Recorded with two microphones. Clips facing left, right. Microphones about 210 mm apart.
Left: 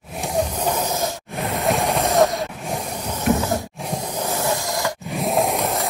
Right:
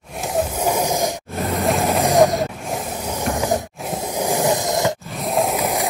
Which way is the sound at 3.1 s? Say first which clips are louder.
Left 1 dB; 15° right (ahead or behind).